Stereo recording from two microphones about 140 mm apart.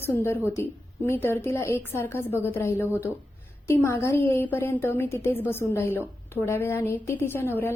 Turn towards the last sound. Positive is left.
turn(degrees=15)  # may be behind; listen again after turning